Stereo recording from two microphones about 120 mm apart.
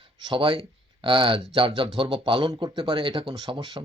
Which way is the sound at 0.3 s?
45° right (ahead or behind).